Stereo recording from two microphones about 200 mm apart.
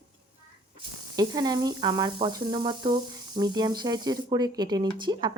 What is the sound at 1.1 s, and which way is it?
Speech, 20° right (ahead or behind).